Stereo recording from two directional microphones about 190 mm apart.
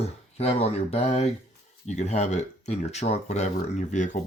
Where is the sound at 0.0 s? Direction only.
35° left (ahead or behind).